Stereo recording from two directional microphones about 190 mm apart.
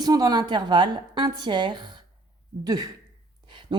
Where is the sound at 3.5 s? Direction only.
25° right (ahead or behind).